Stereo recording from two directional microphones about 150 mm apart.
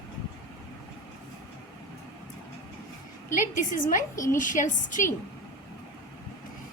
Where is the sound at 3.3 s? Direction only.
60° left (ahead or behind).